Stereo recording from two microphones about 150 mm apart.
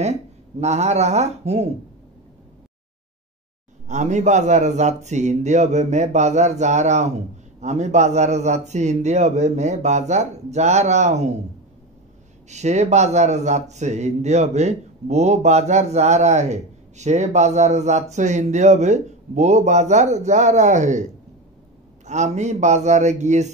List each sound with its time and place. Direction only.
0.0 s speech: 50° right (ahead or behind)
3.8 s a man's voice: 50° right (ahead or behind)
12.4 s a man's voice: 50° right (ahead or behind)